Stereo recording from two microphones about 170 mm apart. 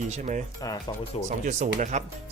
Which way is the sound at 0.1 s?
45° right (ahead or behind).